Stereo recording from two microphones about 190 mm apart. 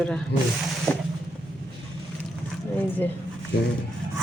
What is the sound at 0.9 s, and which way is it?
Vehicle, 5° left (ahead or behind).